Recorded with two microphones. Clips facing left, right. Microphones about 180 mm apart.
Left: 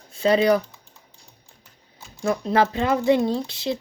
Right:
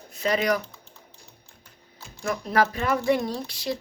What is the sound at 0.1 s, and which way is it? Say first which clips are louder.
Speech: left 6 dB; 30° left (ahead or behind).